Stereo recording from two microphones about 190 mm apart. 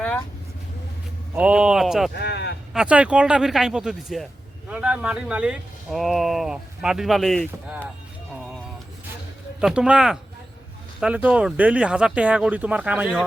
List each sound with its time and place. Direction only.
1.4 s speech: 5° right (ahead or behind)
2.1 s speech: 60° left (ahead or behind)
2.7 s speech: 5° right (ahead or behind)
8.3 s music: centre (ahead or behind)
9.6 s speech: 5° right (ahead or behind)